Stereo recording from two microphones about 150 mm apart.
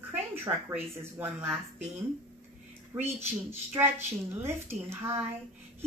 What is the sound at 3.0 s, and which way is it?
A woman's voice, 15° right (ahead or behind).